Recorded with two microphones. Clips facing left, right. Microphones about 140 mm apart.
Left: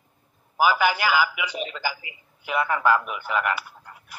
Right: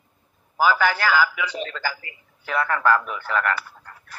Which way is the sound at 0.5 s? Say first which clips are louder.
Right 1 dB; 15° left (ahead or behind).